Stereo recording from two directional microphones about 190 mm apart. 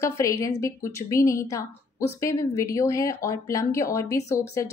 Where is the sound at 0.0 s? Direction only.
15° left (ahead or behind).